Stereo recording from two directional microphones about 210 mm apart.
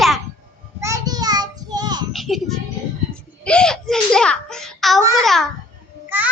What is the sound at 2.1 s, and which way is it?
Child singing, centre (ahead or behind).